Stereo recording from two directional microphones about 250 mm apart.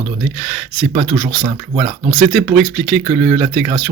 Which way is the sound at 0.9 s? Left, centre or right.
Centre.